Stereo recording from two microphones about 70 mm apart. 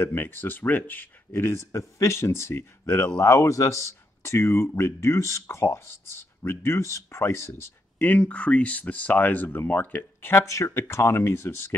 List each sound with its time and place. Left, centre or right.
0.0 s speech: left
8.0 s speech: left
10.4 s speech: left